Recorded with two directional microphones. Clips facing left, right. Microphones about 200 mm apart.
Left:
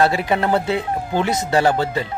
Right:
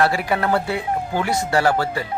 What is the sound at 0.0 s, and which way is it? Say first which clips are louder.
Speech: left 2 dB; 20° left (ahead or behind).